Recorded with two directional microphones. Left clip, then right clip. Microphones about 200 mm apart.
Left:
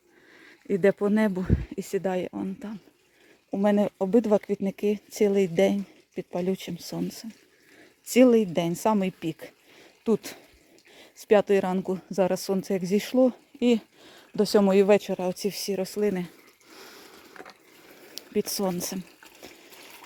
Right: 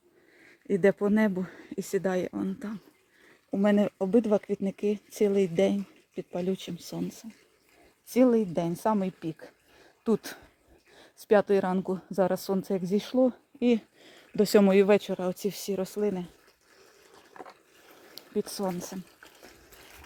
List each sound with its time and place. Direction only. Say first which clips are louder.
0.7 s speech: left 2 dB; 5° left (ahead or behind)
18.1 s speech: left 4 dB; 20° left (ahead or behind)